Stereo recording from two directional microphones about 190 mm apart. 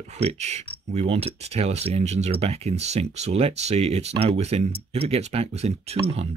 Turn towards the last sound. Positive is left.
turn(degrees=-35)  # may be behind; listen again after turning